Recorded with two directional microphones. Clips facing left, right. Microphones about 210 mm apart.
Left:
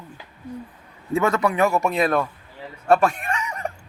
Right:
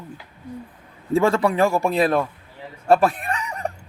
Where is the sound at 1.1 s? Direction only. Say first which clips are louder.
Right 2 dB; 30° right (ahead or behind).